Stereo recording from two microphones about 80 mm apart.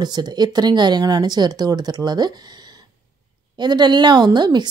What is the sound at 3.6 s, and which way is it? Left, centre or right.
Speech, right.